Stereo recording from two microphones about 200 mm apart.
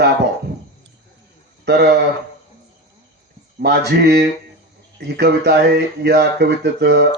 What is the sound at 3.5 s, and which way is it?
Speech, 55° right (ahead or behind).